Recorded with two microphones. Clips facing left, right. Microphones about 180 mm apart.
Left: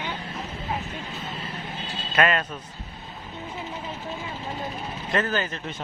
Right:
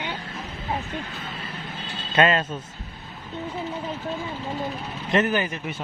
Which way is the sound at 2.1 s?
25° right (ahead or behind).